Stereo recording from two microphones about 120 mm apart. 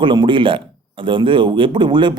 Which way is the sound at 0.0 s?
40° right (ahead or behind).